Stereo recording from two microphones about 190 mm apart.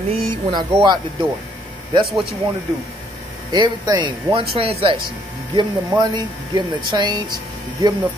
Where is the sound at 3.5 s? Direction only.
20° right (ahead or behind).